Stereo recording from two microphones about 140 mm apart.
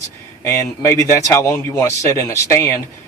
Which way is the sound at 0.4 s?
20° left (ahead or behind).